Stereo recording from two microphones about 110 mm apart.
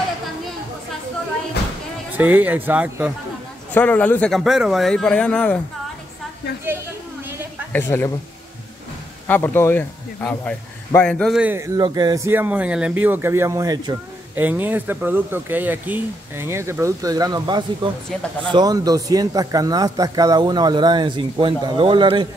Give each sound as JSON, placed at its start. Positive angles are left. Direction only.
{"t": 2.1, "sound": "speech", "side_deg": -15}
{"t": 3.7, "sound": "speech", "side_deg": 15}
{"t": 4.3, "sound": "speech", "side_deg": 0}
{"t": 7.7, "sound": "a woman's voice", "side_deg": 20}
{"t": 9.3, "sound": "speech", "side_deg": 20}
{"t": 11.5, "sound": "speech", "side_deg": -25}
{"t": 11.8, "sound": "speech", "side_deg": -40}
{"t": 12.3, "sound": "speech", "side_deg": -15}
{"t": 14.3, "sound": "speech", "side_deg": -15}